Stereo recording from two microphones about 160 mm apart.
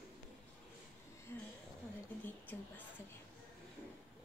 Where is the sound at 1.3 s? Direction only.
15° left (ahead or behind).